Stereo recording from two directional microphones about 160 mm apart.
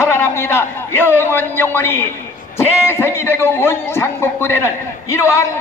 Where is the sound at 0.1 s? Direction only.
15° left (ahead or behind).